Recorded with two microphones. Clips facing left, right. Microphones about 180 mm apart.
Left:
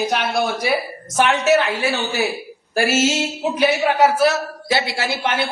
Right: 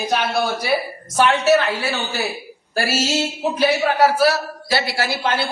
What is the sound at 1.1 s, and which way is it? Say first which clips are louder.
A man's voice: right 1 dB; 20° left (ahead or behind).